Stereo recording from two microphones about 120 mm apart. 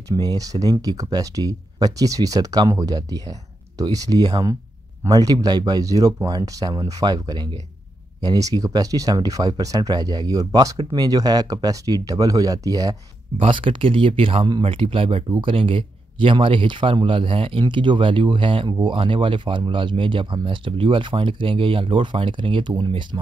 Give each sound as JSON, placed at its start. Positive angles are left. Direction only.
{"t": 0.1, "sound": "speech", "side_deg": -30}
{"t": 13.5, "sound": "speech", "side_deg": -45}
{"t": 15.2, "sound": "speech", "side_deg": -40}